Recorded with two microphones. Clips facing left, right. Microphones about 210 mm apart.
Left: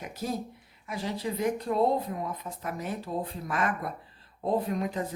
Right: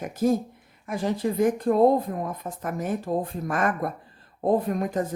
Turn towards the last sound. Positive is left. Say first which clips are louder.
# right 5 dB
turn(degrees=-50)  # may be behind; listen again after turning